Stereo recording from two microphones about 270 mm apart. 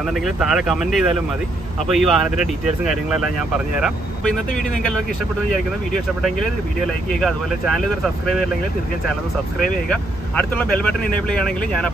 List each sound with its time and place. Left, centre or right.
0.1 s speech: centre
7.1 s speech: centre
9.6 s speech: centre